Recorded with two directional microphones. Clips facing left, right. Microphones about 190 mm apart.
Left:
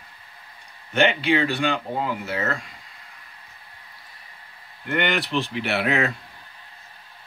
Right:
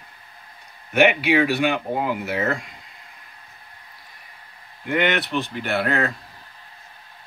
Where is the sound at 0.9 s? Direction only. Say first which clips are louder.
Right 3 dB; 10° right (ahead or behind).